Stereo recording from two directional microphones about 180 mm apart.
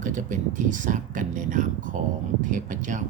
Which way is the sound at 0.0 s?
45° right (ahead or behind).